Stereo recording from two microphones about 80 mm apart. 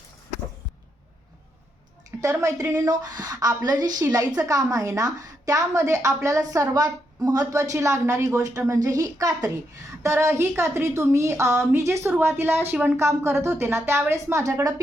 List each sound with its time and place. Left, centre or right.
2.0 s a woman's voice: right
10.0 s a woman's voice: right